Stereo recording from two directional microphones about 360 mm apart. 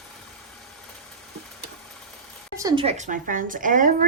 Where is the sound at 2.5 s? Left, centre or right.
Centre.